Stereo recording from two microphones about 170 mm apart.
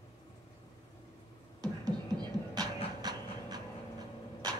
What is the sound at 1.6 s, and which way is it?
Beatboxing, 25° right (ahead or behind).